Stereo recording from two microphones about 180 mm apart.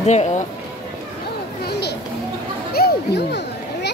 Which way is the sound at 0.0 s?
40° left (ahead or behind).